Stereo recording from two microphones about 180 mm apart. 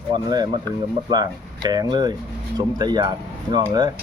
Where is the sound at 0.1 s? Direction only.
20° right (ahead or behind).